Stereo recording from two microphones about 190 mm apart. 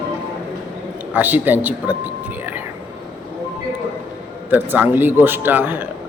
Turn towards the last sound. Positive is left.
turn(degrees=-10)  # may be behind; listen again after turning